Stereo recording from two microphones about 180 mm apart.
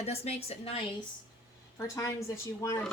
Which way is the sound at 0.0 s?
35° left (ahead or behind).